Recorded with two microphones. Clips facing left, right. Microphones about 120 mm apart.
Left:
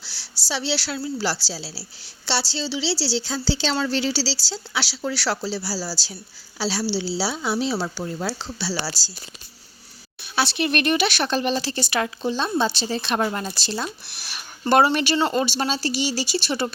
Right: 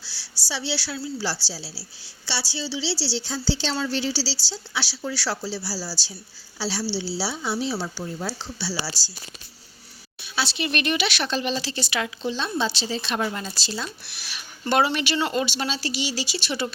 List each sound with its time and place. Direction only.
0.4 s speech: 75° left (ahead or behind)
1.0 s a woman's voice: 90° left
10.2 s speech: 50° left (ahead or behind)